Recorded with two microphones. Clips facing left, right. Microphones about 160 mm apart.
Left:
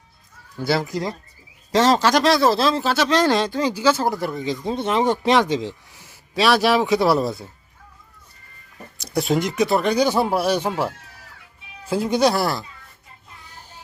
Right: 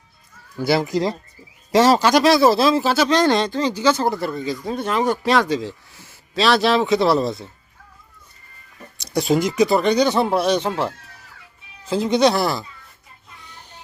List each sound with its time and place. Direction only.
0.6 s speech: 15° right (ahead or behind); by 7.5 s 5° left (ahead or behind)
9.0 s speech: 5° left (ahead or behind)